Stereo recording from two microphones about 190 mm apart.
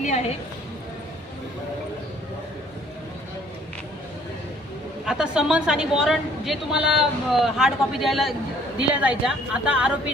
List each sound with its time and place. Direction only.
0.0 s speech: 35° left (ahead or behind)
5.0 s a woman's voice: 5° right (ahead or behind)